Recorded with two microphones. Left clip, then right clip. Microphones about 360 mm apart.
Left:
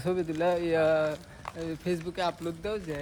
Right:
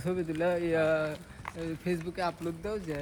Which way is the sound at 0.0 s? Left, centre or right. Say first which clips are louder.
Left 3 dB; left.